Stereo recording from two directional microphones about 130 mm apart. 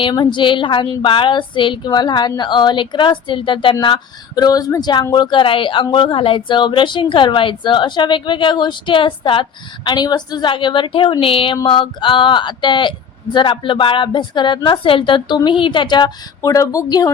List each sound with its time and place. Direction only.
0.0 s speech: 35° left (ahead or behind)